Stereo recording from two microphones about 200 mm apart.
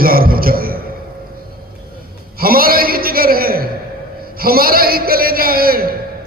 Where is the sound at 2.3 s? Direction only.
45° right (ahead or behind).